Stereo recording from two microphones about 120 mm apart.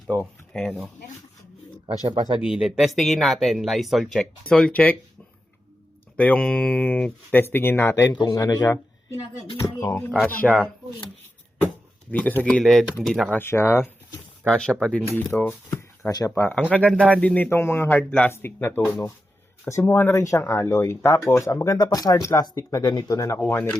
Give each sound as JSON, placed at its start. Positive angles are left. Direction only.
{"t": 0.5, "sound": "speech", "side_deg": 5}
{"t": 2.4, "sound": "speech", "side_deg": -5}
{"t": 6.1, "sound": "speech", "side_deg": 10}
{"t": 8.2, "sound": "speech", "side_deg": 30}
{"t": 10.4, "sound": "speech", "side_deg": 0}
{"t": 12.1, "sound": "speech", "side_deg": 15}
{"t": 13.3, "sound": "speech", "side_deg": 20}
{"t": 14.4, "sound": "speech", "side_deg": 10}
{"t": 15.7, "sound": "shuffling cards", "side_deg": 30}
{"t": 16.3, "sound": "speech", "side_deg": 15}
{"t": 23.4, "sound": "speech", "side_deg": 15}